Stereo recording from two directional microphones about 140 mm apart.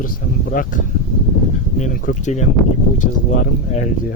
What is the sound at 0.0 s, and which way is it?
Speech, 80° left.